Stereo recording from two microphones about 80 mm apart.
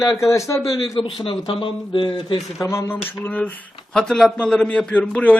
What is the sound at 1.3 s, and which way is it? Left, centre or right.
Speech, left.